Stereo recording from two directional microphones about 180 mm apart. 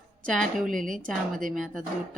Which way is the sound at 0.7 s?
45° right (ahead or behind).